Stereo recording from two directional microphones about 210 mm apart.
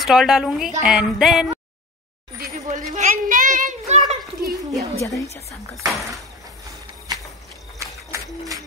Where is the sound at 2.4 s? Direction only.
35° right (ahead or behind).